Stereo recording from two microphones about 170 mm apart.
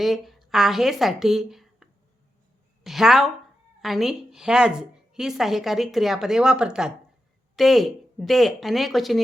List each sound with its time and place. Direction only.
0.0 s a woman's voice: centre (ahead or behind)